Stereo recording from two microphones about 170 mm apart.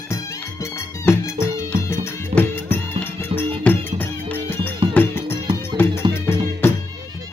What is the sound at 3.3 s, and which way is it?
Music, 35° right (ahead or behind).